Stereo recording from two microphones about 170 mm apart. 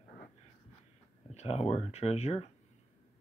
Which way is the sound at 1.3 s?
40° left (ahead or behind).